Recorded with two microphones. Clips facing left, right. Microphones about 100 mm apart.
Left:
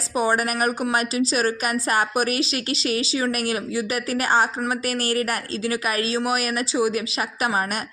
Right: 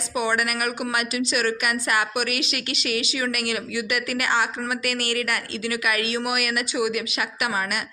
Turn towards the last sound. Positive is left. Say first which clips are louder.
# left 3 dB
turn(degrees=35)  # may be behind; listen again after turning